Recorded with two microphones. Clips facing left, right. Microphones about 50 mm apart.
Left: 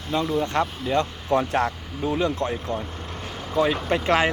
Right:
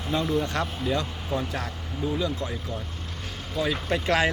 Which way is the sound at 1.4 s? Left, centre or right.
Left.